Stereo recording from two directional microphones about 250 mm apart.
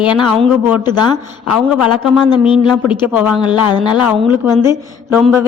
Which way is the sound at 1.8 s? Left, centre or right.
Centre.